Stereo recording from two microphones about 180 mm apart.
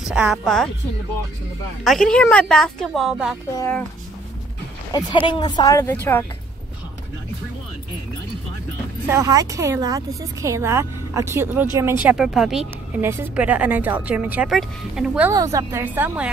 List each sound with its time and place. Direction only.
0.0 s a woman's voice: 5° right (ahead or behind)
1.9 s a woman's voice: 5° left (ahead or behind)
4.9 s speech: 25° left (ahead or behind)
9.0 s a woman's voice: 15° right (ahead or behind)
15.3 s a woman's voice: 20° right (ahead or behind)